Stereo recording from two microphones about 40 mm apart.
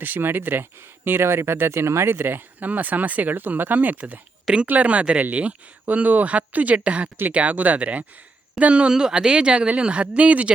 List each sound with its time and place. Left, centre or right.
0.0 s speech: right
2.6 s speech: right
4.5 s speech: centre
4.8 s speech: right
8.9 s speech: centre; by 10.5 s right